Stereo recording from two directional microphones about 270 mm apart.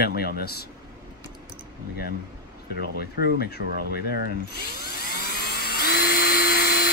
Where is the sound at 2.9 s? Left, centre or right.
Left.